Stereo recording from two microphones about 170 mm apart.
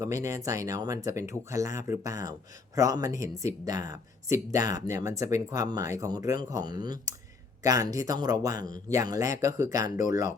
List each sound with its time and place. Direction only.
0.0 s speech: 20° right (ahead or behind)